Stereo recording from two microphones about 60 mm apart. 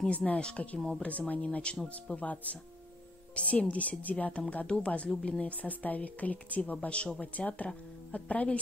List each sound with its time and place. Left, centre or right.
0.0 s speech: centre
1.0 s speech: left
3.3 s speech: centre